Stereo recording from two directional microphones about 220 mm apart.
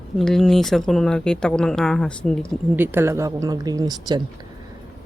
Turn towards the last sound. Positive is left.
turn(degrees=-20)  # may be behind; listen again after turning